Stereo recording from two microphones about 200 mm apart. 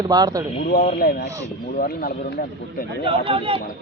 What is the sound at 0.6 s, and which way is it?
Speech, 45° left (ahead or behind).